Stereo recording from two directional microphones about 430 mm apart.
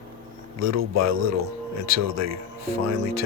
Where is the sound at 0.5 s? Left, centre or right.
Right.